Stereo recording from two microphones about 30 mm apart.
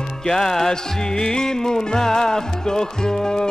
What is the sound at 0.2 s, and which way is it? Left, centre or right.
Music, centre.